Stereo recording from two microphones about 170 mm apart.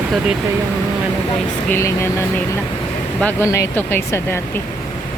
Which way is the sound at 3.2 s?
15° left (ahead or behind).